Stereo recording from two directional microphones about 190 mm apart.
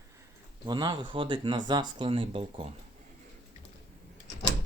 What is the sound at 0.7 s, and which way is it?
Speech, 25° right (ahead or behind).